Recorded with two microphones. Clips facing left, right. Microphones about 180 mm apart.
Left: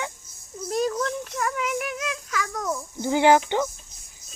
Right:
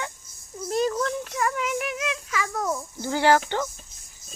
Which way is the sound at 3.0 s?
15° left (ahead or behind).